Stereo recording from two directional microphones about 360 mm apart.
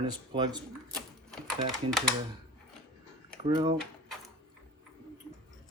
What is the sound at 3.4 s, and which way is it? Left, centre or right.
Speech, centre.